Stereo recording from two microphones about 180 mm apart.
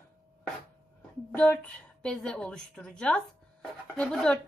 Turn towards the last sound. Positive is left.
turn(degrees=5)  # may be behind; listen again after turning